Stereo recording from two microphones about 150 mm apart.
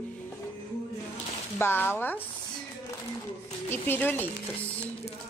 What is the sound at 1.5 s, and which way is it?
Speech, 15° left (ahead or behind).